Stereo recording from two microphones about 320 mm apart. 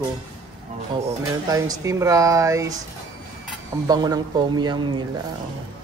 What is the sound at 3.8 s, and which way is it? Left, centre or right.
Speech, centre.